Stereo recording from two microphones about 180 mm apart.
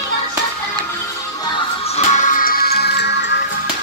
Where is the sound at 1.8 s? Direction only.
40° left (ahead or behind); by 3.4 s 70° left (ahead or behind).